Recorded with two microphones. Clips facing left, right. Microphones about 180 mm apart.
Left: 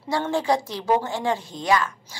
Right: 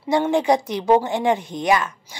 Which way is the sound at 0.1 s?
20° right (ahead or behind).